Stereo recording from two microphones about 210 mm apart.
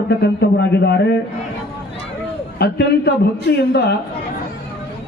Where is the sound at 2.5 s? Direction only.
50° left (ahead or behind).